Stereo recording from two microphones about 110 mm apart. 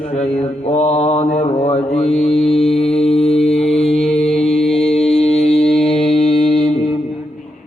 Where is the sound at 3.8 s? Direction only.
70° left (ahead or behind).